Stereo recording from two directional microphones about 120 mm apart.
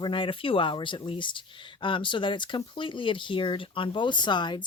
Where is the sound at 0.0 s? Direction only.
45° left (ahead or behind).